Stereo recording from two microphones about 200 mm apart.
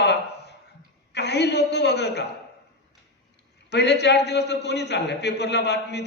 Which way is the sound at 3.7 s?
60° left (ahead or behind).